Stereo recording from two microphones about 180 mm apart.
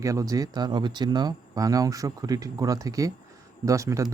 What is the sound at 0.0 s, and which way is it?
Speech, 20° right (ahead or behind).